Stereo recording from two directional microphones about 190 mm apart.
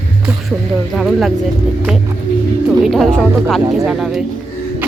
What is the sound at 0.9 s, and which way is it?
Speech, centre (ahead or behind).